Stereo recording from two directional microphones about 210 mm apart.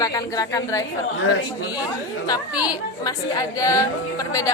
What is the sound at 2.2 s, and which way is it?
A woman's voice, 15° left (ahead or behind).